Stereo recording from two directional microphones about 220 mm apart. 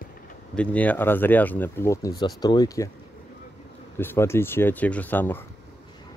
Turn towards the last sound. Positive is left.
turn(degrees=10)  # may be behind; listen again after turning